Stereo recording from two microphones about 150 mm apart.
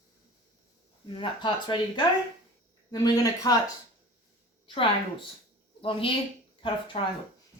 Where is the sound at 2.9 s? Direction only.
25° left (ahead or behind).